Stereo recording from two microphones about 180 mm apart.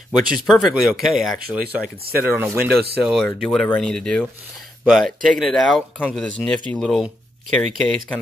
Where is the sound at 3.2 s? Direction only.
5° left (ahead or behind).